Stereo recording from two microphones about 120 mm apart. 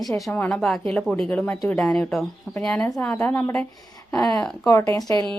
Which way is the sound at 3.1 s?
15° left (ahead or behind).